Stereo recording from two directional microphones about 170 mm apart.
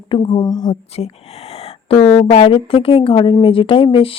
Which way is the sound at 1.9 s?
35° left (ahead or behind).